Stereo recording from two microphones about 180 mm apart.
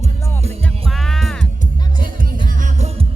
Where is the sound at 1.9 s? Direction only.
50° right (ahead or behind).